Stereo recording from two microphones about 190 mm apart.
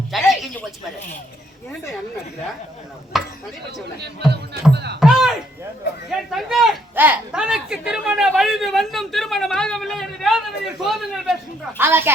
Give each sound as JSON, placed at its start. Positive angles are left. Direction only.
{"t": 0.1, "sound": "a sound", "side_deg": 0}
{"t": 3.1, "sound": "speech", "side_deg": 0}
{"t": 4.7, "sound": "speech", "side_deg": -60}
{"t": 4.9, "sound": "a sound", "side_deg": 0}
{"t": 6.1, "sound": "speech", "side_deg": 0}
{"t": 11.8, "sound": "speech", "side_deg": -10}